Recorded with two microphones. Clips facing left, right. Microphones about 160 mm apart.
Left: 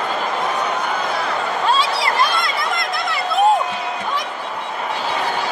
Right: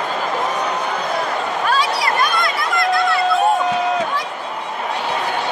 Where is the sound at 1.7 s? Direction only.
25° left (ahead or behind).